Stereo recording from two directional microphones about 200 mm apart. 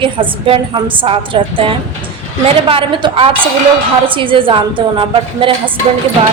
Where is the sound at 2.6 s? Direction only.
25° right (ahead or behind).